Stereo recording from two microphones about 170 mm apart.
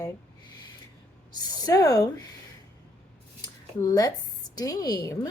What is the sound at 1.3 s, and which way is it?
Speech, 25° left (ahead or behind).